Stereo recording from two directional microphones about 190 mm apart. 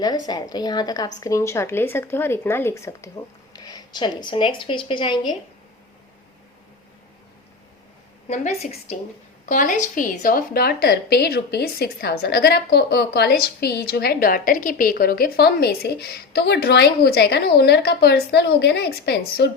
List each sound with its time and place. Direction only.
0.3 s a woman's voice: 20° left (ahead or behind)
8.3 s a woman's voice: 35° left (ahead or behind)
9.5 s a woman's voice: 45° left (ahead or behind)